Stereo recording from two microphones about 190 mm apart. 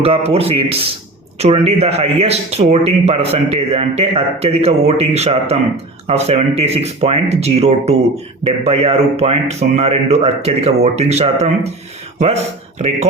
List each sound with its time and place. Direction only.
0.0 s speech: 30° right (ahead or behind)